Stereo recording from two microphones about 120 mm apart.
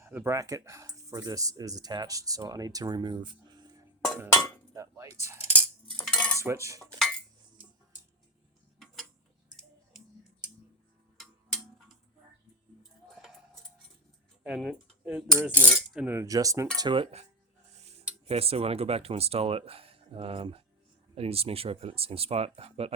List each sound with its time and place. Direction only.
0.0 s speech: 20° right (ahead or behind)
4.7 s cutlery: 25° right (ahead or behind)
6.1 s cutlery: 10° left (ahead or behind)
6.4 s speech: 25° right (ahead or behind)
11.2 s a sound: centre (ahead or behind)
14.4 s speech: centre (ahead or behind)
15.4 s cutlery: 15° right (ahead or behind)
16.2 s speech: 30° right (ahead or behind)
16.7 s speech: 40° right (ahead or behind)
17.7 s speech: 60° right (ahead or behind)